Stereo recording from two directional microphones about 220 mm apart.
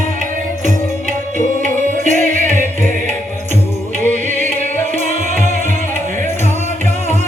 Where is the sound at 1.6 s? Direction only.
35° right (ahead or behind).